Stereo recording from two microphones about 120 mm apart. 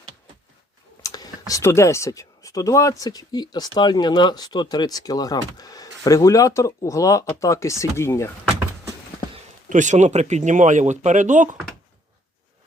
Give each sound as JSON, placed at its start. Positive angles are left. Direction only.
{"t": 1.0, "sound": "speech", "side_deg": 30}
{"t": 9.6, "sound": "speech", "side_deg": -90}